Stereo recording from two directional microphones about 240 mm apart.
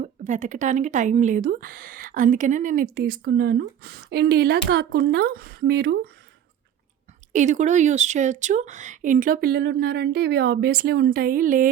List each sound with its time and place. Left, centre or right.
0.0 s speech: right
7.3 s speech: right